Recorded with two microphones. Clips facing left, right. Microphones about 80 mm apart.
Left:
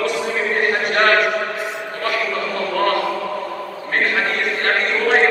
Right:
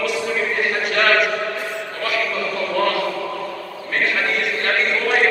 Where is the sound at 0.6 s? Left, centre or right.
Left.